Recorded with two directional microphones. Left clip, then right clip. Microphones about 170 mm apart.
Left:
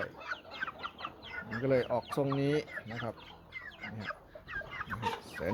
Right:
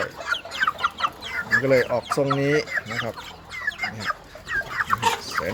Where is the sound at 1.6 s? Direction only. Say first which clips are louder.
Right 10 dB; centre (ahead or behind).